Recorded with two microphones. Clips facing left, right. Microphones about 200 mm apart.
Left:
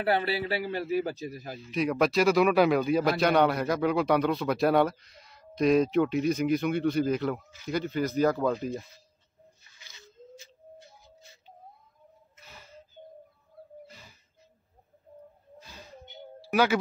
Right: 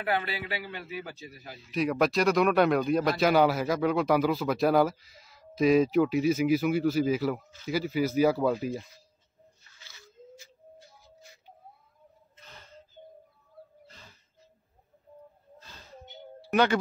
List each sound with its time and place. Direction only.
0.0 s a man's voice: 35° left (ahead or behind)
1.7 s a man's voice: centre (ahead or behind)
9.8 s bird: 20° left (ahead or behind)
12.4 s a sound: 10° left (ahead or behind)
13.8 s gasp: 10° left (ahead or behind)
16.4 s speech: 5° left (ahead or behind)